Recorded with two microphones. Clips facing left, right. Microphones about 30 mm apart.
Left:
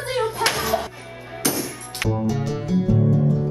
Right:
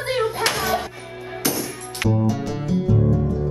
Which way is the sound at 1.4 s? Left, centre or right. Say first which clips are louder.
Even; centre.